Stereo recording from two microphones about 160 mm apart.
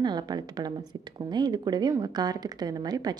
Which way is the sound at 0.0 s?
25° right (ahead or behind).